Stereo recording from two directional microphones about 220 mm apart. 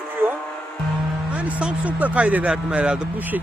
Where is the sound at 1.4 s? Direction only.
5° right (ahead or behind).